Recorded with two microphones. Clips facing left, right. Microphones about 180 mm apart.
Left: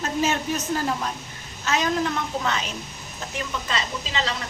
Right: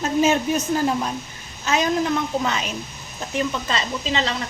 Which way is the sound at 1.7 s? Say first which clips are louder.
Right 3 dB; 15° right (ahead or behind).